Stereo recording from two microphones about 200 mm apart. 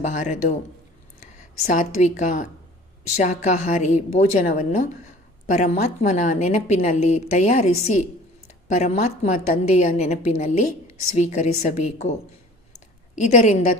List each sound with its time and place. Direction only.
0.1 s a woman's voice: 40° left (ahead or behind)
13.1 s a woman's voice: 35° left (ahead or behind)